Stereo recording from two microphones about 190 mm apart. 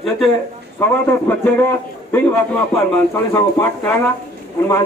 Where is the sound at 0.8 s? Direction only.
15° left (ahead or behind).